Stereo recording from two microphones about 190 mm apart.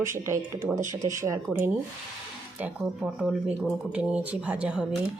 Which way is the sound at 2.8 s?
5° right (ahead or behind).